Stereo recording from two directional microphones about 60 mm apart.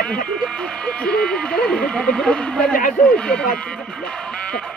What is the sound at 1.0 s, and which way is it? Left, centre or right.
Speech, centre.